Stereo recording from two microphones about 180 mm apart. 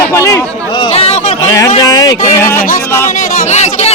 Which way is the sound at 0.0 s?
15° left (ahead or behind).